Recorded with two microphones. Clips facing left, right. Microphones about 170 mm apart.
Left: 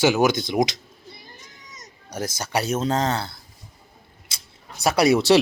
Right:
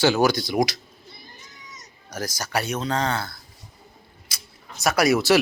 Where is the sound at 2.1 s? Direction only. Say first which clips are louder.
Left 1 dB; 25° left (ahead or behind).